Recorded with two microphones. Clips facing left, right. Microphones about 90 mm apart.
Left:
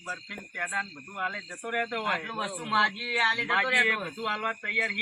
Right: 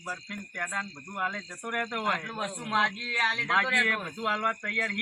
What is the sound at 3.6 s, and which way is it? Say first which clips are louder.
Speech: left 1 dB; 20° right (ahead or behind).